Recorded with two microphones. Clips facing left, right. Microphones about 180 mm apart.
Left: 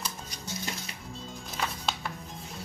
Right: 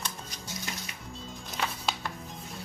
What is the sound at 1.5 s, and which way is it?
Music, centre (ahead or behind).